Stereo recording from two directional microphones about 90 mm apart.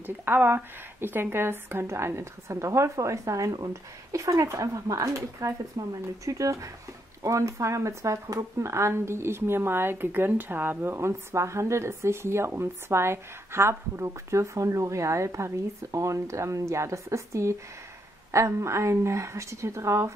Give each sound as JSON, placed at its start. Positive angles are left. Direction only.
{"t": 0.0, "sound": "speech", "side_deg": -25}